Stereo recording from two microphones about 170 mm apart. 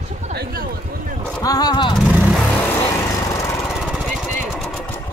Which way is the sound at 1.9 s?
Centre (ahead or behind).